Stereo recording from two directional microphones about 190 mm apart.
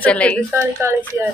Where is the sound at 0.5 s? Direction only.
15° right (ahead or behind).